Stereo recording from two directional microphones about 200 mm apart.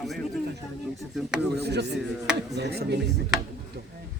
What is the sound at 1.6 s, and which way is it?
Speech, 55° right (ahead or behind).